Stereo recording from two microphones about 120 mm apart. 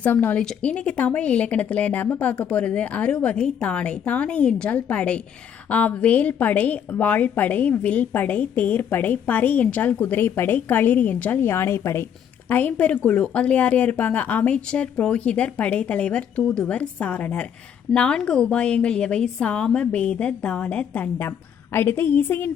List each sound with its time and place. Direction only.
0.0 s a woman's voice: 15° left (ahead or behind)